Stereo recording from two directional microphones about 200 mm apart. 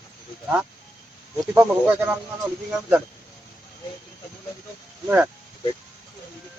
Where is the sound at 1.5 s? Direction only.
10° right (ahead or behind).